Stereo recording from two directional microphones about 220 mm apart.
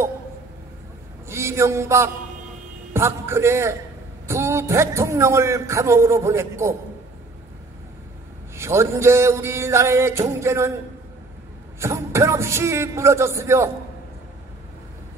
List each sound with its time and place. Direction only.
1.3 s a man's voice: 10° right (ahead or behind)
8.5 s a man's voice: 10° right (ahead or behind)
11.8 s a man's voice: 10° right (ahead or behind)